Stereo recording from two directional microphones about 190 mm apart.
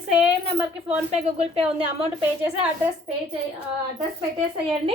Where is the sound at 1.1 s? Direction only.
35° right (ahead or behind).